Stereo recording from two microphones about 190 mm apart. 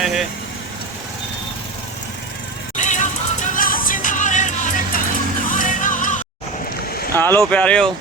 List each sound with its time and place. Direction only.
0.0 s speech: centre (ahead or behind)
2.7 s music: 40° left (ahead or behind)
7.2 s speech: 10° left (ahead or behind)